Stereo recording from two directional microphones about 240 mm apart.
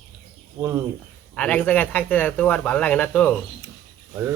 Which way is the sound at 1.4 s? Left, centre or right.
Centre.